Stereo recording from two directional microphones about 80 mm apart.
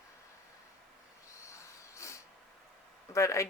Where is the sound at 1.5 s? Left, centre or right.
Left.